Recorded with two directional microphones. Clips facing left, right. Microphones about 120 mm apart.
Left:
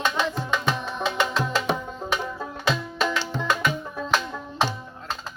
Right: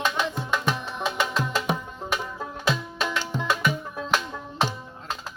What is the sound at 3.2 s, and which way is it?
Music, 10° right (ahead or behind).